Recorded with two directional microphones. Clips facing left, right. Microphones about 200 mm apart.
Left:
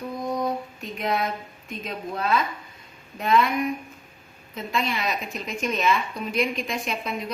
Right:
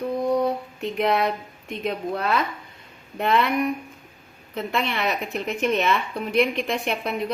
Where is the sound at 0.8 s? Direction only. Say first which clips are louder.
Right 8 dB; 70° right (ahead or behind).